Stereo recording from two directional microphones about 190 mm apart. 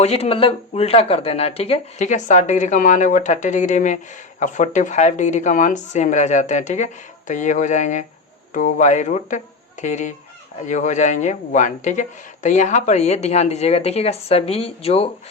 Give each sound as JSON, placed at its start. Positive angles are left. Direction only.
{"t": 0.0, "sound": "speech", "side_deg": 35}